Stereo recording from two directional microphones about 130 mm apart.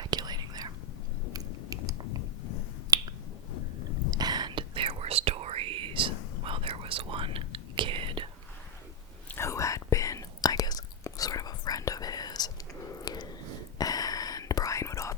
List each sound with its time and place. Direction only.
0.0 s whispering: 30° right (ahead or behind)
1.3 s chewing: 25° right (ahead or behind)
4.1 s whispering: 30° right (ahead or behind)
9.3 s whispering: 20° left (ahead or behind)
13.0 s a sound: 30° left (ahead or behind)
13.7 s whispering: 30° left (ahead or behind)